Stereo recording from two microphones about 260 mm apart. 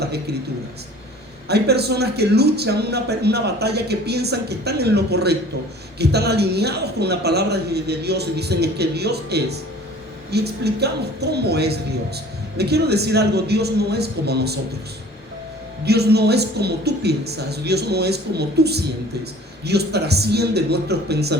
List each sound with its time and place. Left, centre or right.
0.0 s speech: right
1.5 s speech: right
15.9 s speech: right